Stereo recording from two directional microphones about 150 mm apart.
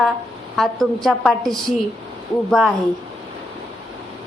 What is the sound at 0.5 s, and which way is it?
A woman's voice, centre (ahead or behind).